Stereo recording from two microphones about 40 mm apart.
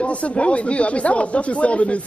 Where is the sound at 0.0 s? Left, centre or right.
Left.